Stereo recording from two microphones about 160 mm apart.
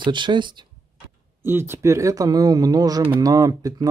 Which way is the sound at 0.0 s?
30° right (ahead or behind).